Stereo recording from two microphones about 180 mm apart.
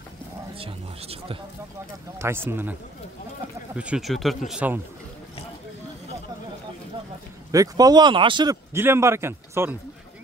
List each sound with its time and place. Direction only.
0.6 s speech: 30° right (ahead or behind)
2.1 s speech: 15° right (ahead or behind)
7.5 s speech: 20° right (ahead or behind)
8.7 s speech: 15° right (ahead or behind)